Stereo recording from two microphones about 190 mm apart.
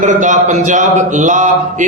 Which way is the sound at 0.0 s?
40° right (ahead or behind).